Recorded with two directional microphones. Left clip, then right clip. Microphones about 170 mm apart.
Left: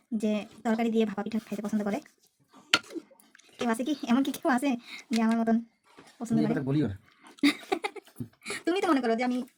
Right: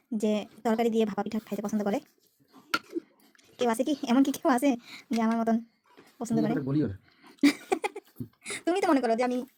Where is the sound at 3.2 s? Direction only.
25° right (ahead or behind).